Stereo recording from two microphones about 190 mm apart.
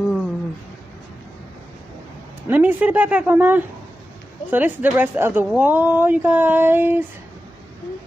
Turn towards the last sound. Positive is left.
turn(degrees=-10)  # may be behind; listen again after turning